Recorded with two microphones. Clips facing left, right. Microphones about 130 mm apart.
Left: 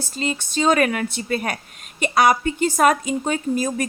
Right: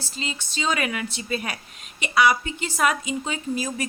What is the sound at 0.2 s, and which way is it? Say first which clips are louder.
A woman's voice: left 8 dB; 50° left (ahead or behind).